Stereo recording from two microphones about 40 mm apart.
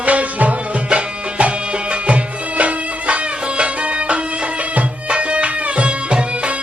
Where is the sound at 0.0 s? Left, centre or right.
Right.